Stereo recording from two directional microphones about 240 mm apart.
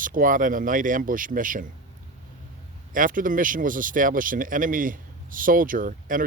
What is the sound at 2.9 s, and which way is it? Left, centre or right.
Speech, right.